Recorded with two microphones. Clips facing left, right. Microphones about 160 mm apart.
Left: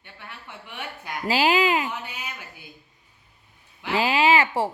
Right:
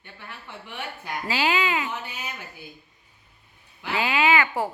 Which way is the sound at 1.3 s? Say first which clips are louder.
Left 4 dB; 40° left (ahead or behind).